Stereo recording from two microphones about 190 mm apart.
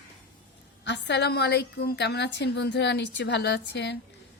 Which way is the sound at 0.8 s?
65° left (ahead or behind).